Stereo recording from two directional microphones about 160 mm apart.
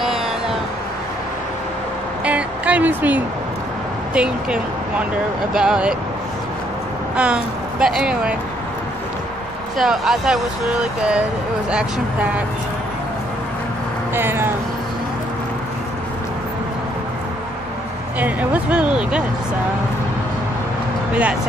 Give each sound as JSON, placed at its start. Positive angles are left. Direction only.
{"t": 2.2, "sound": "a sound", "side_deg": -10}
{"t": 4.1, "sound": "speech", "side_deg": -5}
{"t": 7.2, "sound": "speech", "side_deg": -5}
{"t": 9.8, "sound": "speech", "side_deg": -5}
{"t": 14.1, "sound": "speech", "side_deg": -15}
{"t": 18.2, "sound": "speech", "side_deg": -10}
{"t": 21.1, "sound": "speech", "side_deg": -10}